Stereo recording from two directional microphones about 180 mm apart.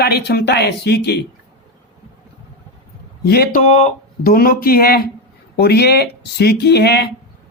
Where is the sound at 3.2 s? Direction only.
60° left (ahead or behind).